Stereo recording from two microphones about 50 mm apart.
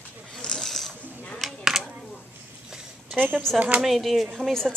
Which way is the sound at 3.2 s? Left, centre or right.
Right.